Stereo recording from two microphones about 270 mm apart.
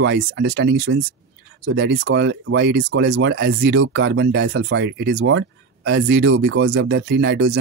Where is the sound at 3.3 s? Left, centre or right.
Right.